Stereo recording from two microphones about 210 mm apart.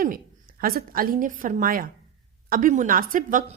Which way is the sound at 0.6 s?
45° right (ahead or behind).